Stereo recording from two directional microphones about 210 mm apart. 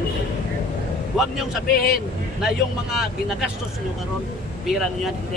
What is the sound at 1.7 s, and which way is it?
Speech, 50° left (ahead or behind).